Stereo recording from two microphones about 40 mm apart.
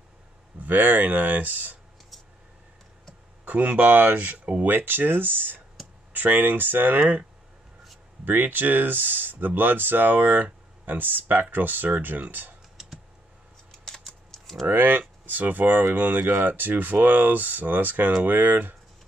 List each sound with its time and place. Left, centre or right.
0.6 s speech: right
3.4 s speech: right
4.6 s speech: right
8.3 s speech: right
14.0 s typing: centre
14.7 s speech: right